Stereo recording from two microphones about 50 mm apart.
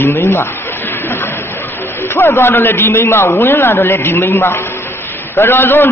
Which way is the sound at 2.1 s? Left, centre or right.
Left.